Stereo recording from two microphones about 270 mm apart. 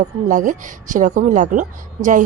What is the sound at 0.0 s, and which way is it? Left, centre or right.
A woman's voice, right.